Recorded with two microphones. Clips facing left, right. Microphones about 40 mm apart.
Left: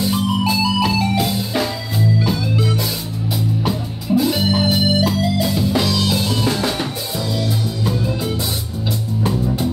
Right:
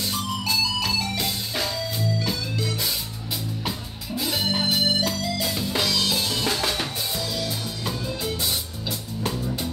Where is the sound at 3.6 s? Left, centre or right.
Centre.